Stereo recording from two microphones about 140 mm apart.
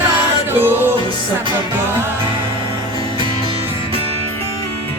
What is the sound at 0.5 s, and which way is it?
Music, 15° right (ahead or behind).